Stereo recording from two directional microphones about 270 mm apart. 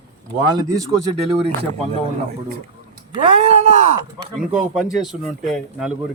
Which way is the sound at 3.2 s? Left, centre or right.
Right.